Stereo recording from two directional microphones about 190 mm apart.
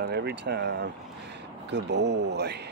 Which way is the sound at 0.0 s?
60° right (ahead or behind).